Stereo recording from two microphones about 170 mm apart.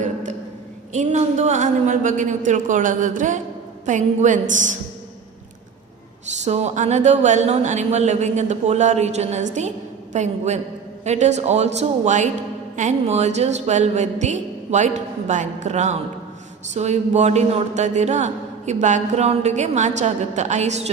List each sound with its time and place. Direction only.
0.9 s a man's voice: 40° right (ahead or behind)
6.4 s a man's voice: 40° right (ahead or behind)